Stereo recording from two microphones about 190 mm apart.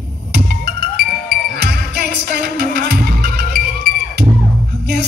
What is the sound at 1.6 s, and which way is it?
Music, 60° right (ahead or behind).